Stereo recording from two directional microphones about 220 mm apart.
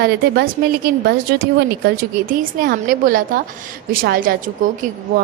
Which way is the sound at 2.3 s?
40° right (ahead or behind).